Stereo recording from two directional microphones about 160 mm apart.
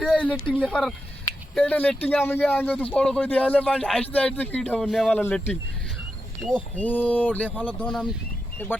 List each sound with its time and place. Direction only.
0.0 s a sound: 5° left (ahead or behind)
0.6 s speech: 5° left (ahead or behind)
5.1 s speech: 10° left (ahead or behind)